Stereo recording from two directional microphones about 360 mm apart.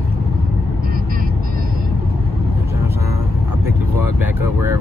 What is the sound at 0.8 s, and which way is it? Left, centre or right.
Vehicle, right.